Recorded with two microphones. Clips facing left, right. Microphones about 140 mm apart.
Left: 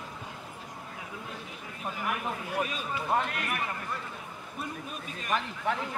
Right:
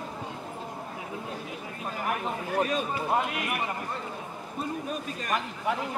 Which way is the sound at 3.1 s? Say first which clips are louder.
Right 1 dB; 10° right (ahead or behind).